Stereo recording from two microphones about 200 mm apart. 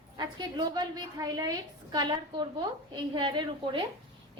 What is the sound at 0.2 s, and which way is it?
A woman's voice, 20° right (ahead or behind).